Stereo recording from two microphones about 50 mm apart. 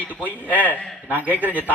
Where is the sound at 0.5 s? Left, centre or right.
Left.